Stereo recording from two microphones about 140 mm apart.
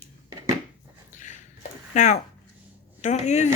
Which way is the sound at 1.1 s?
60° left (ahead or behind).